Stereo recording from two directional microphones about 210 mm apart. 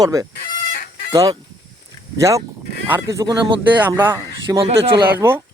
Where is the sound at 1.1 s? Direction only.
15° right (ahead or behind).